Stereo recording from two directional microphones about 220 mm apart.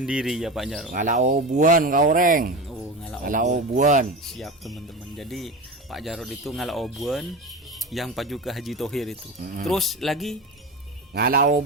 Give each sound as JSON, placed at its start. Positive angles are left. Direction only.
{"t": 0.0, "sound": "speech", "side_deg": -5}
{"t": 0.9, "sound": "speech", "side_deg": -35}
{"t": 4.3, "sound": "speech", "side_deg": 0}
{"t": 11.1, "sound": "speech", "side_deg": -45}